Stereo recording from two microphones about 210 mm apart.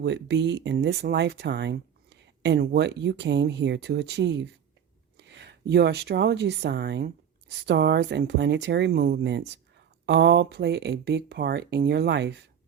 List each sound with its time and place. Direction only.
0.0 s speech: 55° right (ahead or behind)